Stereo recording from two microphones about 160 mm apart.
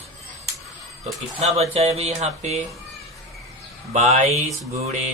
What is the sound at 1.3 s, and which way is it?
Speech, 40° right (ahead or behind).